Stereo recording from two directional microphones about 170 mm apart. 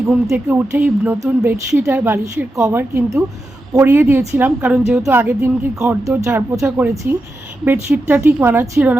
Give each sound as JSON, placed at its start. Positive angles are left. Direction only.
{"t": 0.1, "sound": "a woman's voice", "side_deg": 0}
{"t": 0.4, "sound": "a woman's voice", "side_deg": -15}